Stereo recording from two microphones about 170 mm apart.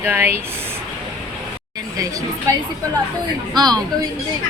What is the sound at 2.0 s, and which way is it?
Speech, 20° right (ahead or behind).